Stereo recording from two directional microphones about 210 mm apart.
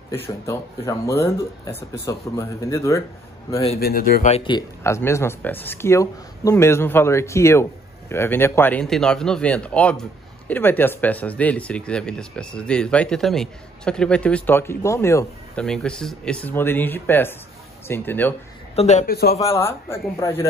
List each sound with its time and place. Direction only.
0.1 s speech: 10° left (ahead or behind)
3.8 s speech: 45° left (ahead or behind)
4.3 s speech: 20° left (ahead or behind)
18.8 s a man's voice: 35° left (ahead or behind)
19.5 s speech: 10° left (ahead or behind)